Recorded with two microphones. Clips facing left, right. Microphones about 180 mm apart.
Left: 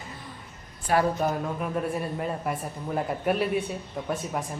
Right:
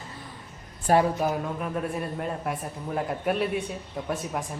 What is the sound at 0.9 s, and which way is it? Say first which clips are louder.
Speech: right 3 dB; 45° right (ahead or behind).